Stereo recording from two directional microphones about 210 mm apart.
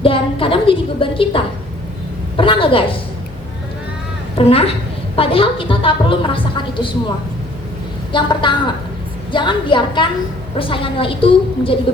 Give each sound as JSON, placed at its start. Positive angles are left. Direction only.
{"t": 0.0, "sound": "a woman's voice", "side_deg": 25}
{"t": 4.4, "sound": "a woman's voice", "side_deg": 25}
{"t": 8.1, "sound": "a woman's voice", "side_deg": 20}